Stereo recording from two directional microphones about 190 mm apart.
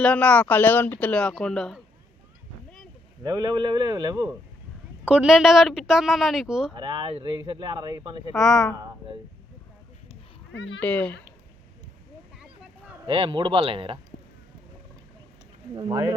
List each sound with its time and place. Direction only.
0.0 s speech: 5° left (ahead or behind)
3.2 s speech: 20° right (ahead or behind)
5.0 s speech: 5° right (ahead or behind)
6.7 s speech: 25° right (ahead or behind)
8.3 s speech: centre (ahead or behind)
10.5 s speech: 70° left (ahead or behind)
10.8 s speech: 5° left (ahead or behind)
12.4 s a sound: 5° right (ahead or behind)
13.1 s speech: 30° right (ahead or behind)
15.7 s speech: 20° right (ahead or behind)